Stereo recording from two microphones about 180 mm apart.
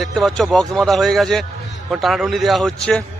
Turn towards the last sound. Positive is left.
turn(degrees=5)  # may be behind; listen again after turning